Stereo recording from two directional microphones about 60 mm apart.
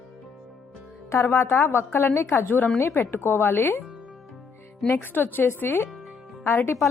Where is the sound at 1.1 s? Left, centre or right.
Left.